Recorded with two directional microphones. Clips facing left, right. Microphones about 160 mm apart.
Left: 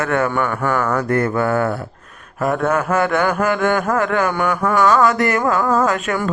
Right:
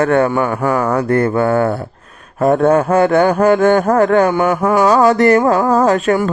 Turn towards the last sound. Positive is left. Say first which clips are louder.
# right 5 dB
turn(degrees=-40)  # may be behind; listen again after turning